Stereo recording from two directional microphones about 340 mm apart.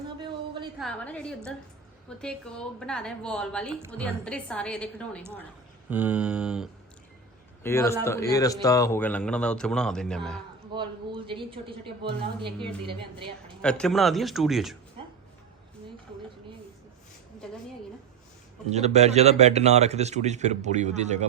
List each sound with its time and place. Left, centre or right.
0.2 s a sound: centre
0.8 s a man's voice: centre
10.8 s a woman's voice: centre
13.6 s a man's voice: centre
18.7 s speech: centre